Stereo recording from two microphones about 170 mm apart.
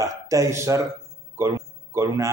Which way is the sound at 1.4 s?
15° right (ahead or behind).